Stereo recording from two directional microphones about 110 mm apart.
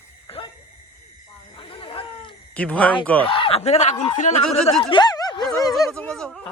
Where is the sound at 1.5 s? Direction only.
50° left (ahead or behind).